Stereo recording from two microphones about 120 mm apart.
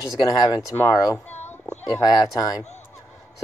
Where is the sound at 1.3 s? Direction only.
65° left (ahead or behind).